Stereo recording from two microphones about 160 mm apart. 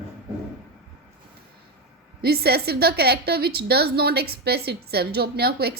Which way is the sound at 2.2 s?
85° right.